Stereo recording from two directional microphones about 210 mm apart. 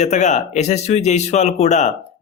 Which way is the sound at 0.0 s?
35° left (ahead or behind).